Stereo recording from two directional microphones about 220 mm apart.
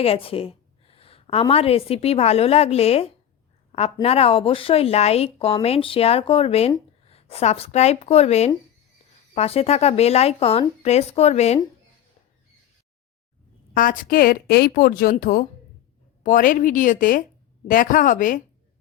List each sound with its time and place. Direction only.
0.0 s a woman's voice: 25° left (ahead or behind)
3.7 s a sound: 30° left (ahead or behind)
4.0 s speech: 25° left (ahead or behind)
13.7 s a woman's voice: 40° left (ahead or behind)